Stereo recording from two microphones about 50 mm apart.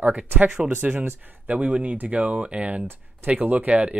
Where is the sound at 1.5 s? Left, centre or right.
Right.